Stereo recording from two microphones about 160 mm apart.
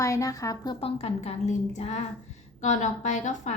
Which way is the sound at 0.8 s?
40° left (ahead or behind).